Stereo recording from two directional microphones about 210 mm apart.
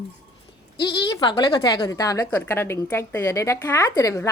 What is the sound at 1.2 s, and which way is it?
Humming, 20° left (ahead or behind).